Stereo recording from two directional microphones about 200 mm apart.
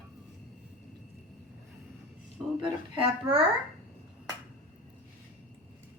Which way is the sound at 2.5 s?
25° right (ahead or behind).